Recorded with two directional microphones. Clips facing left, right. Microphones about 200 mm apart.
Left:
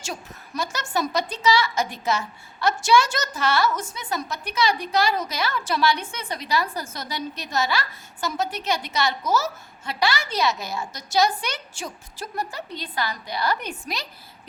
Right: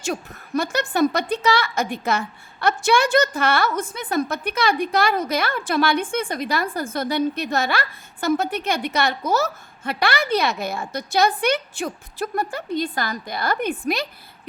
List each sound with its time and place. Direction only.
0.0 s a woman's voice: 55° right (ahead or behind)